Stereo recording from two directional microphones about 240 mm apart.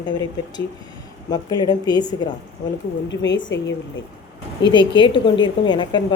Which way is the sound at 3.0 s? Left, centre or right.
Left.